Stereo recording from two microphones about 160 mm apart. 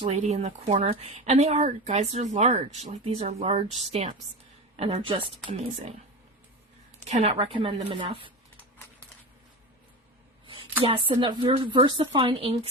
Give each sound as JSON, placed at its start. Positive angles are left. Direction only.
{"t": 0.0, "sound": "speech", "side_deg": -45}
{"t": 4.8, "sound": "a woman's voice", "side_deg": -35}
{"t": 7.0, "sound": "a woman's voice", "side_deg": -45}
{"t": 10.4, "sound": "a sound", "side_deg": -35}
{"t": 10.8, "sound": "a woman's voice", "side_deg": -35}